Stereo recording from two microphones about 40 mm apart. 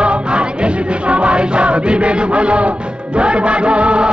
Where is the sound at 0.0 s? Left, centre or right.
Right.